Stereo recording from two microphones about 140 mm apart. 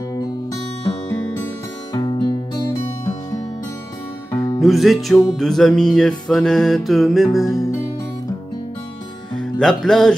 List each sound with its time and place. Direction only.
2.0 s music: 30° left (ahead or behind)
4.6 s music: centre (ahead or behind)
9.4 s music: 5° left (ahead or behind)